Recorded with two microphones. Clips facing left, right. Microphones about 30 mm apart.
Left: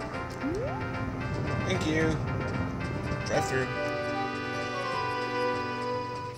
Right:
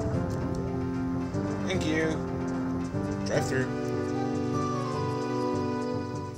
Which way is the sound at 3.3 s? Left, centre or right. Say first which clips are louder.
Left 1 dB; left.